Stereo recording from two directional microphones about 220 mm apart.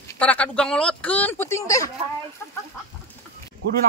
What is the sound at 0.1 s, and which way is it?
Speech, 5° left (ahead or behind).